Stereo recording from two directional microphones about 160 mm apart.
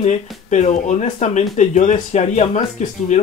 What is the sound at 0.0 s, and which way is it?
Speech, 45° left (ahead or behind).